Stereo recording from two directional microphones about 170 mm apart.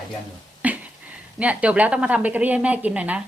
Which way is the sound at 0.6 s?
10° right (ahead or behind).